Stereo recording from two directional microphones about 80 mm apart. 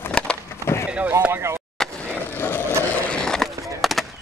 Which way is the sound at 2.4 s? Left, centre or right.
Left.